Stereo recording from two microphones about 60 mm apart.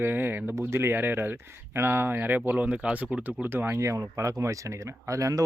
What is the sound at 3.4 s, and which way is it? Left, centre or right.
Speech, right.